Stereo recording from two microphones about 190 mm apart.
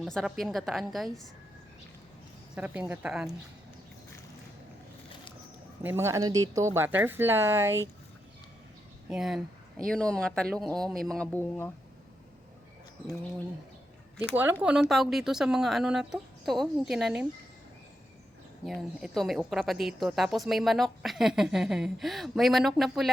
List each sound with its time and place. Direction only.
0.0 s speech: centre (ahead or behind)
2.6 s speech: 10° right (ahead or behind)
5.8 s speech: 10° right (ahead or behind)
9.0 s speech: centre (ahead or behind)
14.6 s speech: 5° right (ahead or behind)
18.6 s speech: centre (ahead or behind)